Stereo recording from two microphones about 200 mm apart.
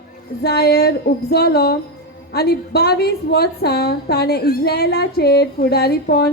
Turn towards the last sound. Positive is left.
turn(degrees=50)  # may be behind; listen again after turning